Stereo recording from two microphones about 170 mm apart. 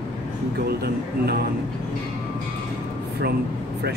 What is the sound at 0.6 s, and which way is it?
Speech, 70° right (ahead or behind).